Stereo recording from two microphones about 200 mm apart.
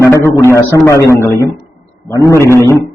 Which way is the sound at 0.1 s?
15° left (ahead or behind).